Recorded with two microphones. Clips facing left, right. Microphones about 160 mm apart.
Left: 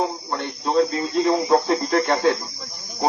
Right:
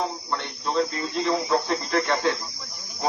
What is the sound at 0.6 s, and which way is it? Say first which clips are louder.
Speech: left 6 dB; 35° left (ahead or behind).